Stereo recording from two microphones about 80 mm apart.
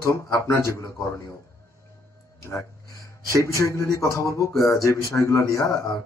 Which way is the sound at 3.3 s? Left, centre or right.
Left.